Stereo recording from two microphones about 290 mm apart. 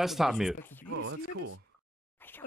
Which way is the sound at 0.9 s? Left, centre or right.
Right.